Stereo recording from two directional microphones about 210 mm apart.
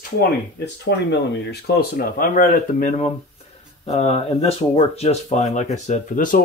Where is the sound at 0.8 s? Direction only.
55° left (ahead or behind).